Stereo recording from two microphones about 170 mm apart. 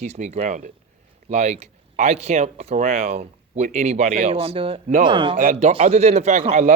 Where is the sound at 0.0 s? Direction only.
40° right (ahead or behind).